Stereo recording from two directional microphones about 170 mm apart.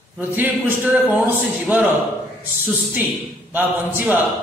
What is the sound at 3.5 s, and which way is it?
Speech, 10° right (ahead or behind).